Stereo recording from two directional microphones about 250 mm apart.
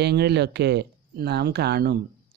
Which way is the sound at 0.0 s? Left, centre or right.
Right.